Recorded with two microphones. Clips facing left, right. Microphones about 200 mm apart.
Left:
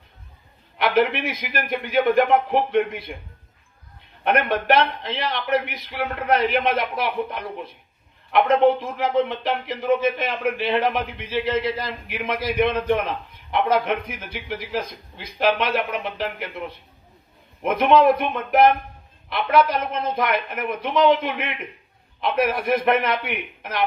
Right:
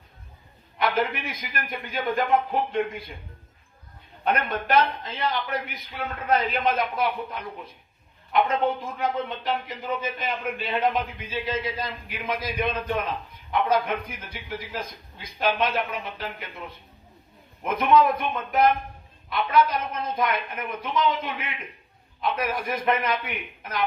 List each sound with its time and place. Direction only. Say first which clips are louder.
0.8 s a man's voice: left 6 dB; 70° left (ahead or behind)
4.2 s a man's voice: left 5 dB; 70° left (ahead or behind)